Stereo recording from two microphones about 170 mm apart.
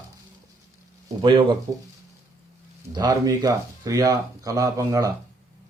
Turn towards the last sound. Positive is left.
turn(degrees=-20)  # may be behind; listen again after turning